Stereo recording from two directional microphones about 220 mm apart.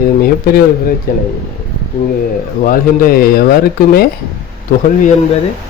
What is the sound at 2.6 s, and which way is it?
Speech, 40° left (ahead or behind).